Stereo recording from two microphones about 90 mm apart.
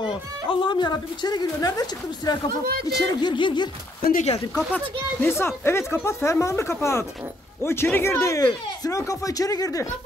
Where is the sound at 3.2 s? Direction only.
60° left (ahead or behind).